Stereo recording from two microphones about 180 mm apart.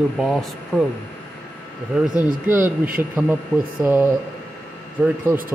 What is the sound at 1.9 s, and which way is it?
Speech, 5° right (ahead or behind).